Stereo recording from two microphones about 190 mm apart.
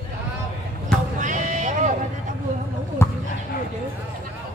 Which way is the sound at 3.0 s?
15° left (ahead or behind).